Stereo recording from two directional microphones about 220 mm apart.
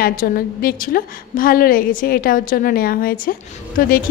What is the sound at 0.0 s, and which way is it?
A woman's voice, 40° left (ahead or behind).